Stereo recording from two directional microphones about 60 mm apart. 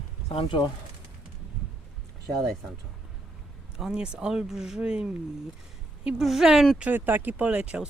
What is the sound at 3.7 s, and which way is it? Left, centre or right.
Speech, centre.